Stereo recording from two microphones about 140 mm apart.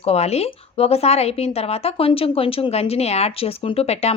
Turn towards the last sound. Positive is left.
turn(degrees=50)  # may be behind; listen again after turning